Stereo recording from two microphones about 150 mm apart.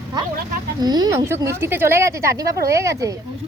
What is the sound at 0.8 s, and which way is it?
A woman's voice, 25° right (ahead or behind).